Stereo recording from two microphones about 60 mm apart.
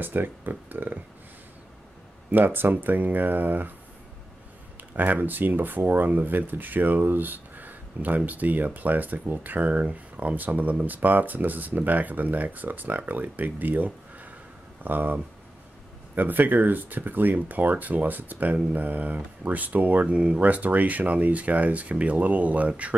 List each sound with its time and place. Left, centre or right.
0.0 s speech: right
2.3 s speech: right
4.9 s speech: right